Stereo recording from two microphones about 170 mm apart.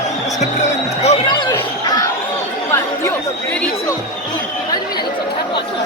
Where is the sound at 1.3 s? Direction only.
25° left (ahead or behind).